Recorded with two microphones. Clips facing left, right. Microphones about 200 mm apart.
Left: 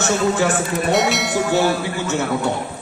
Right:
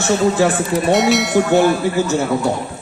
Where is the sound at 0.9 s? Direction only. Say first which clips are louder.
Right 5 dB; centre (ahead or behind).